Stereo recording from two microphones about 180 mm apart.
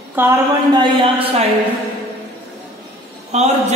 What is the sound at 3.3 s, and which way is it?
Speech, 40° right (ahead or behind).